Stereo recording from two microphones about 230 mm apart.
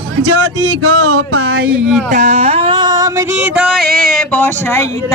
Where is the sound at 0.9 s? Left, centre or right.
Right.